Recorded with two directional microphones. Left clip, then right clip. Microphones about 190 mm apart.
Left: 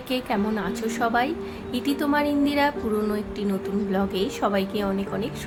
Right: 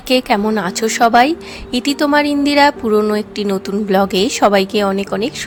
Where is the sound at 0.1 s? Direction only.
60° right (ahead or behind).